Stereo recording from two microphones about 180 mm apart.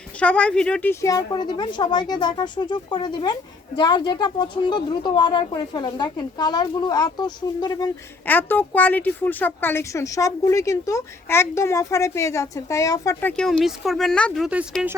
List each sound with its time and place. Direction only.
0.2 s a woman's voice: 5° left (ahead or behind); by 7.9 s 20° left (ahead or behind)
8.3 s speech: 10° left (ahead or behind)
13.3 s speech: 5° left (ahead or behind)